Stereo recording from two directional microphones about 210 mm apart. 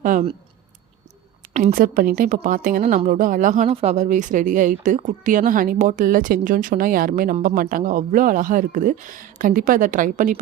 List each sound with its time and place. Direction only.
0.0 s speech: 40° right (ahead or behind)
1.5 s speech: 40° right (ahead or behind)